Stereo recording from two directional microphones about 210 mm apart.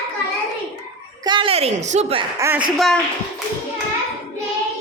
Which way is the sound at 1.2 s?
25° right (ahead or behind).